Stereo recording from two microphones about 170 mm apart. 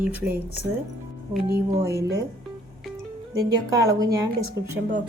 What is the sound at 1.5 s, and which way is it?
Speech, 20° right (ahead or behind).